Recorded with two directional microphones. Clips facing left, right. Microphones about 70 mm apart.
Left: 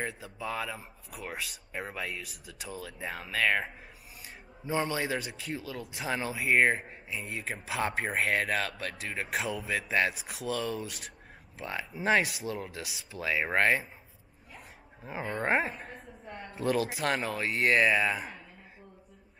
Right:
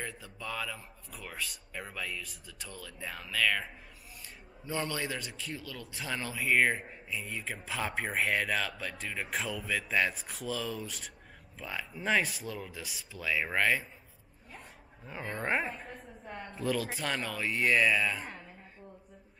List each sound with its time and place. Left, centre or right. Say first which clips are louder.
0.0 s a man's voice: left 5 dB; centre
13.1 s a man's voice: left 3 dB; centre
15.0 s a man's voice: left 4 dB; centre